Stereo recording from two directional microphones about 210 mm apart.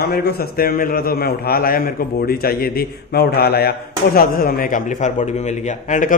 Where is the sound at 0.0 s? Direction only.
50° left (ahead or behind).